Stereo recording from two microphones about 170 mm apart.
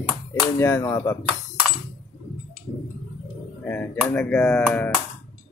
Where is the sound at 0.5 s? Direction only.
15° left (ahead or behind).